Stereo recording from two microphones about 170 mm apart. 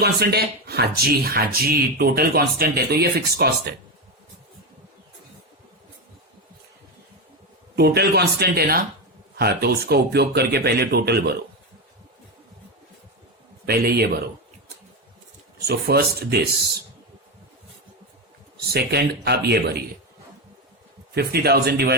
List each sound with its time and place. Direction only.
0.0 s speech: 70° right (ahead or behind)
7.8 s speech: 70° right (ahead or behind)
13.7 s speech: 65° right (ahead or behind)
15.6 s speech: 70° right (ahead or behind)
18.5 s speech: 70° right (ahead or behind)
21.2 s speech: 65° right (ahead or behind)